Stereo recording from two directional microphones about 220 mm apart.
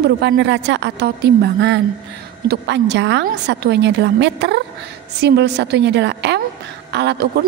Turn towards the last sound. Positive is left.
turn(degrees=-50)  # may be behind; listen again after turning